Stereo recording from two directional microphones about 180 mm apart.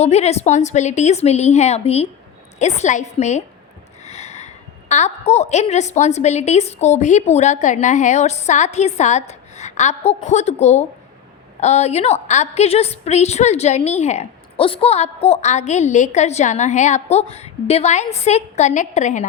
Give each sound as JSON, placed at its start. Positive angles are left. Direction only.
{"t": 0.0, "sound": "a woman's voice", "side_deg": 35}